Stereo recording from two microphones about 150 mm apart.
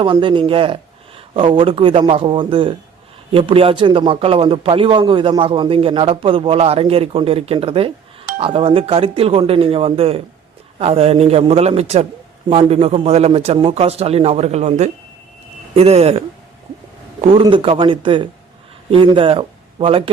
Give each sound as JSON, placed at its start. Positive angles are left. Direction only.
{"t": 0.0, "sound": "a man's voice", "side_deg": -35}